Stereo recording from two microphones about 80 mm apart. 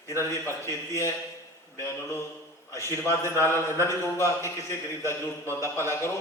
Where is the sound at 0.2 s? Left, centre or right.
Left.